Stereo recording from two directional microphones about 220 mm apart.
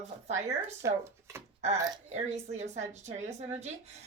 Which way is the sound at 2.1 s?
30° right (ahead or behind).